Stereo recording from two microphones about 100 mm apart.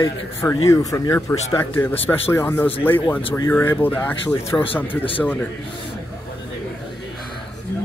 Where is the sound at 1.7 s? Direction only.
20° left (ahead or behind).